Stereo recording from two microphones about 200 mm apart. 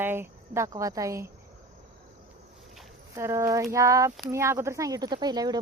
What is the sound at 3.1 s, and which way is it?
Speech, 15° right (ahead or behind).